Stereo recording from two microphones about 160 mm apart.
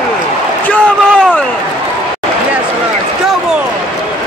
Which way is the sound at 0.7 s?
5° left (ahead or behind).